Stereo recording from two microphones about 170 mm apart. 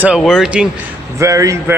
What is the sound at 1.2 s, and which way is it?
Speech, 20° right (ahead or behind).